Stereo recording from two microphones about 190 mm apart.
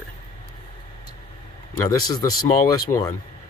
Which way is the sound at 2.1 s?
20° left (ahead or behind).